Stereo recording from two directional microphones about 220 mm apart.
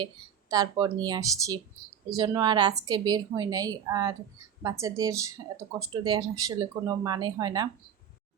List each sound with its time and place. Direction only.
0.0 s speech: 15° right (ahead or behind)